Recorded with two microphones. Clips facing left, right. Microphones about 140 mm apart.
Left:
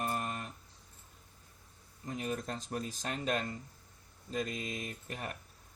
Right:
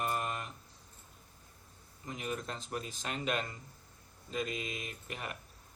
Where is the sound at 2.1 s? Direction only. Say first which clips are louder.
Left 2 dB; 40° left (ahead or behind).